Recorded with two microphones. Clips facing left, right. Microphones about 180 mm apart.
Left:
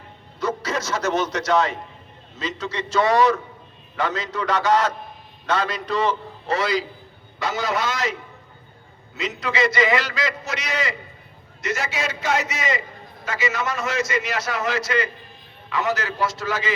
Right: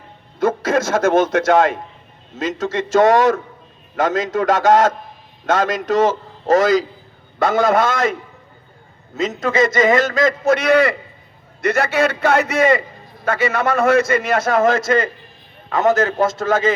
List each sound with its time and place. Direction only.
0.3 s a man's voice: 50° right (ahead or behind)
9.1 s a man's voice: 45° right (ahead or behind)